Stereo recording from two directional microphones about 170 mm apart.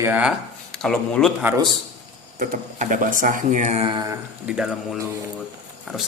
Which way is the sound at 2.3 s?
50° right (ahead or behind).